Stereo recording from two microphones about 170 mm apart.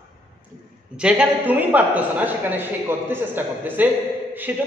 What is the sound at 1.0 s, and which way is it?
A man's voice, 5° right (ahead or behind).